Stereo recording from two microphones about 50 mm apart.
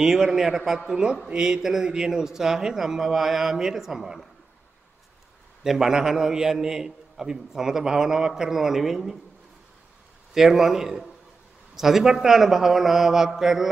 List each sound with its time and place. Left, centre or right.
0.0 s a man's voice: centre
0.8 s a man's voice: centre
5.6 s a man's voice: centre
10.3 s a man's voice: centre